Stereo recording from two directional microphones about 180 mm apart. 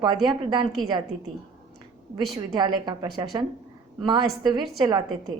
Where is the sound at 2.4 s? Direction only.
25° right (ahead or behind).